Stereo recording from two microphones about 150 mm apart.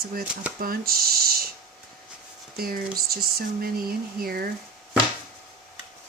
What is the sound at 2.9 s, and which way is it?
Speech, 90° right.